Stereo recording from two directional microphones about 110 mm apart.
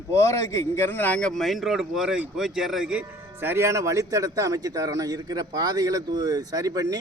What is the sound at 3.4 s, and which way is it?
A man's voice, 20° right (ahead or behind).